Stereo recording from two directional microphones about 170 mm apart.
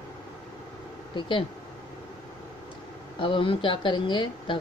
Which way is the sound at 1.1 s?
30° left (ahead or behind).